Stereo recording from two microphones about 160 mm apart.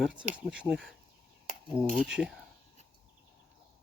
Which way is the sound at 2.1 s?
5° right (ahead or behind).